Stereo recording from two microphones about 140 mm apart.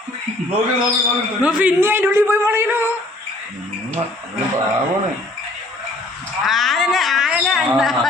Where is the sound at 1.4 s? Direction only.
10° right (ahead or behind).